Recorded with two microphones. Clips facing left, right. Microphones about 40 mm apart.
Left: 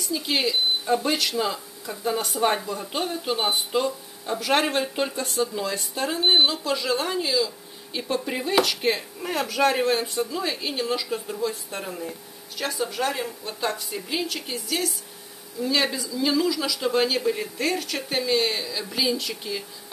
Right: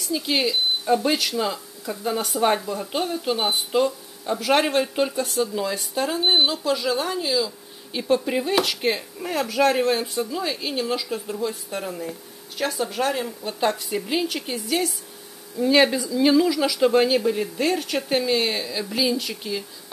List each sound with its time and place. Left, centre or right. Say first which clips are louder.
0.3 s speech: right 1 dB; centre
13.7 s speech: right 4 dB; centre
15.6 s speech: right 6 dB; right
17.3 s speech: right 3 dB; centre
17.6 s speech: right 2 dB; centre